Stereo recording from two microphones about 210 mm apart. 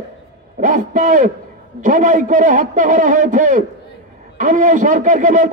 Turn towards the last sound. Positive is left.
turn(degrees=-35)  # may be behind; listen again after turning